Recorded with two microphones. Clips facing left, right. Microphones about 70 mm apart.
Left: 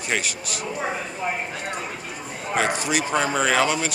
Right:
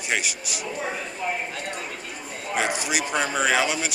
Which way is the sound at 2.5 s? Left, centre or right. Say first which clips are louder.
Left 3 dB; centre.